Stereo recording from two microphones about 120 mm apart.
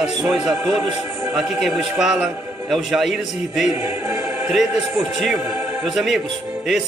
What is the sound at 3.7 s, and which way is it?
Choir, 20° right (ahead or behind).